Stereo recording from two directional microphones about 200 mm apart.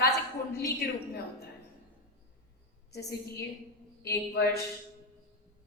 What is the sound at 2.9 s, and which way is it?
Speech, 55° left (ahead or behind).